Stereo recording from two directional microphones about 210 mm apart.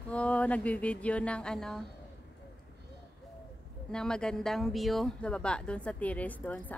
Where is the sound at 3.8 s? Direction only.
5° left (ahead or behind).